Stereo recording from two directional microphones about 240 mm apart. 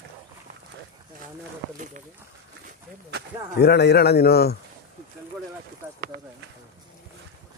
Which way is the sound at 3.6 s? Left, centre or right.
Left.